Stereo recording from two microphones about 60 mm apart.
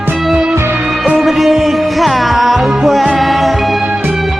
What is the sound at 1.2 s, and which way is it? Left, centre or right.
Music, centre.